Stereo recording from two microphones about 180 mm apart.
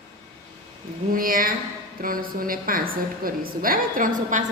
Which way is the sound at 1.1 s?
50° right (ahead or behind).